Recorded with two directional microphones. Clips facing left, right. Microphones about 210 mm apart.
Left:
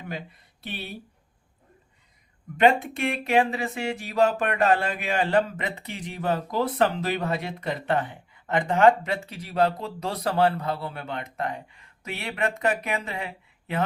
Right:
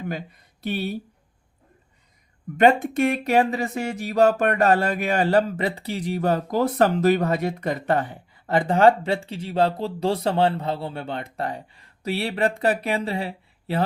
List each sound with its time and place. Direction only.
0.1 s speech: 45° right (ahead or behind)
2.6 s speech: 45° right (ahead or behind)